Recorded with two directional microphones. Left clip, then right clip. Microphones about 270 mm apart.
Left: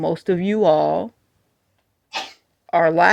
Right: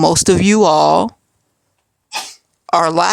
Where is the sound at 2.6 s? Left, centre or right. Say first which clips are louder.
Right 3 dB; right.